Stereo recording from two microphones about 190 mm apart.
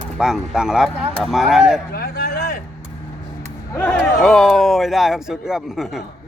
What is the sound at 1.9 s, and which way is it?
Speech, 55° left (ahead or behind).